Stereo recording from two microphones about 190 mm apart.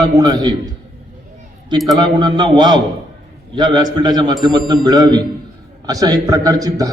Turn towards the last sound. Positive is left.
turn(degrees=-20)  # may be behind; listen again after turning